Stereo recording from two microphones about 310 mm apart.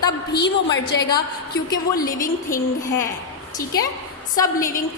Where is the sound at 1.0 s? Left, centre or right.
Centre.